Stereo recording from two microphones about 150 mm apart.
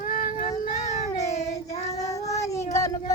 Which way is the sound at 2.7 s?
20° left (ahead or behind).